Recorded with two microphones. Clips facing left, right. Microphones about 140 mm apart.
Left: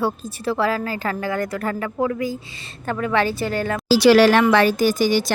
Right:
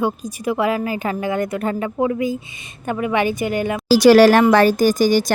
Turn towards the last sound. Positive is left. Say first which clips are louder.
# right 3 dB
turn(degrees=-45)  # may be behind; listen again after turning